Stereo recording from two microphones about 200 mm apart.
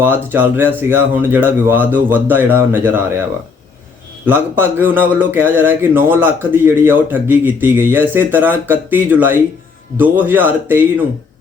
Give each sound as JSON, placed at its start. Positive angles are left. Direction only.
{"t": 0.0, "sound": "speech", "side_deg": -10}
{"t": 4.3, "sound": "speech", "side_deg": -10}